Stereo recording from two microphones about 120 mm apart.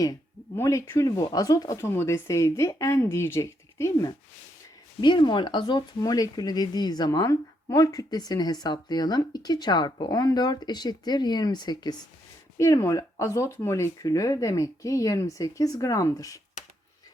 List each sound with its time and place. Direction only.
0.0 s speech: 25° left (ahead or behind)
4.9 s speech: 40° left (ahead or behind)